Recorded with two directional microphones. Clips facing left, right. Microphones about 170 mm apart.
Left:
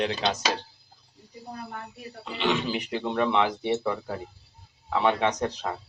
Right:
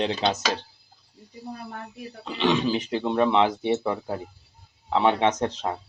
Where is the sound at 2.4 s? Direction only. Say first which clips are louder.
Right 4 dB; 20° right (ahead or behind).